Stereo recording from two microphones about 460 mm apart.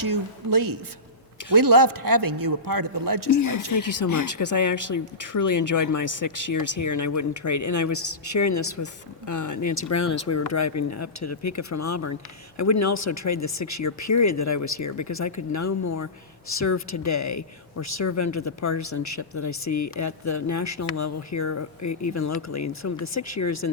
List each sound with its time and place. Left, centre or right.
0.0 s speech: right
3.5 s speech: left